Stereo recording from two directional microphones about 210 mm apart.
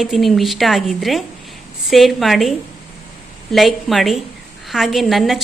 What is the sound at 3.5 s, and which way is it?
Speech, centre (ahead or behind).